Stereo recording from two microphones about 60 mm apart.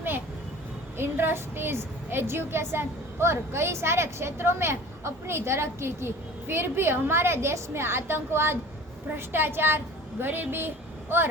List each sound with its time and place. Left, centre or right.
0.9 s a woman's voice: right